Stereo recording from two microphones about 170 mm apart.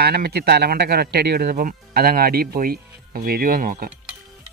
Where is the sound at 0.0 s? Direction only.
70° right (ahead or behind).